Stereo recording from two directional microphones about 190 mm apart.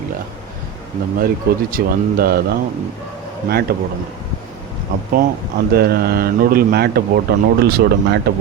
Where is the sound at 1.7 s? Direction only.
50° right (ahead or behind).